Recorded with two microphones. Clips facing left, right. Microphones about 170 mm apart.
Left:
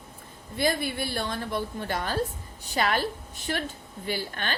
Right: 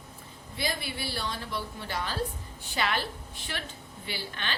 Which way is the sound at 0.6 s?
50° left (ahead or behind).